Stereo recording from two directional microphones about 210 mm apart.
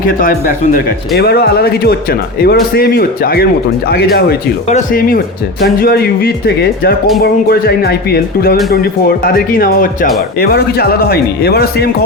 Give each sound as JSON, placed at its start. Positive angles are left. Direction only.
{"t": 0.2, "sound": "speech", "side_deg": 40}